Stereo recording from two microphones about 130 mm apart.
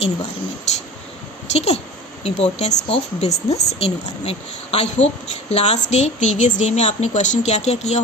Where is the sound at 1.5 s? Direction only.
55° left (ahead or behind).